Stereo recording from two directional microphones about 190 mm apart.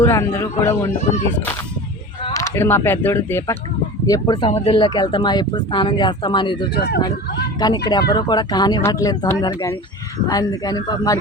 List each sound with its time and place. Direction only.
0.0 s speech: 15° left (ahead or behind)
2.3 s speech: 15° left (ahead or behind)